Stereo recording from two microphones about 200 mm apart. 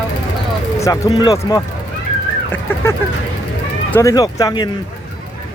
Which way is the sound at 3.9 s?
15° left (ahead or behind).